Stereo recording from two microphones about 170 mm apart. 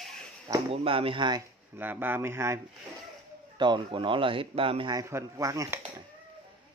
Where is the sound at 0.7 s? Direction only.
30° right (ahead or behind).